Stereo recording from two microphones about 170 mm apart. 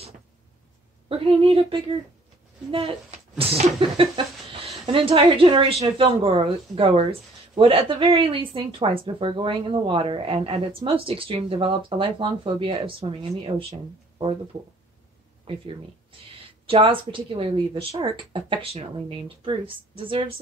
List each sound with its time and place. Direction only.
1.0 s a woman's voice: 30° right (ahead or behind)
15.4 s a woman's voice: 30° right (ahead or behind)